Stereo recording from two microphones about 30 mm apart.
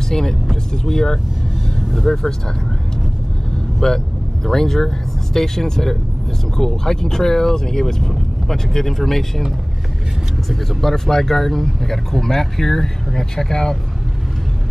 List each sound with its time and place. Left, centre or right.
0.1 s speech: centre
0.5 s vehicle: centre
3.8 s speech: centre
10.5 s speech: centre